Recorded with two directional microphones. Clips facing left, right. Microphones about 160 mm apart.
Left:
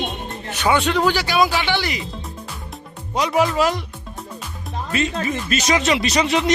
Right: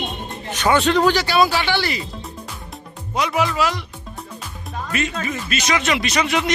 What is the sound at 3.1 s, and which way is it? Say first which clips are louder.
Speech: left 2 dB; 40° left (ahead or behind).